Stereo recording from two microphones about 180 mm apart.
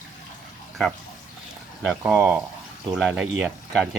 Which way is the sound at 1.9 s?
5° right (ahead or behind).